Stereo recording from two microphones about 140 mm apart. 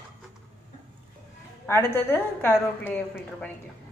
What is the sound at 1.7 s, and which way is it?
A woman's voice, 15° left (ahead or behind).